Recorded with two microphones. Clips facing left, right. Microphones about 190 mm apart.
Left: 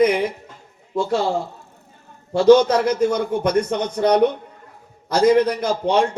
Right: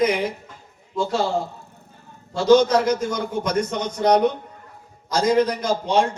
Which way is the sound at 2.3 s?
60° left (ahead or behind).